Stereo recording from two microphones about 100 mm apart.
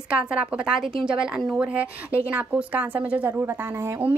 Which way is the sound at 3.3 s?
25° right (ahead or behind).